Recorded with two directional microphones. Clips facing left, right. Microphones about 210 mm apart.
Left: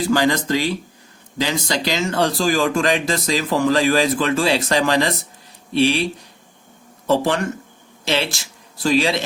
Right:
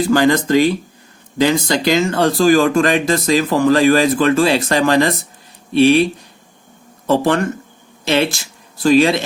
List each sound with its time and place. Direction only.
0.1 s speech: 55° right (ahead or behind)
7.1 s speech: 55° right (ahead or behind)